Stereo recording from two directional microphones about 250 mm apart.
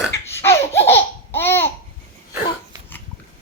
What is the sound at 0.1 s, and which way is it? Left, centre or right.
Laughter, centre.